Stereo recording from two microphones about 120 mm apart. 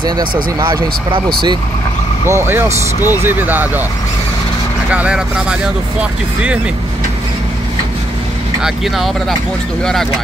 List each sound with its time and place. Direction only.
0.0 s speech: 40° right (ahead or behind)
2.2 s speech: 20° right (ahead or behind)
4.9 s speech: 10° right (ahead or behind)
8.6 s speech: centre (ahead or behind)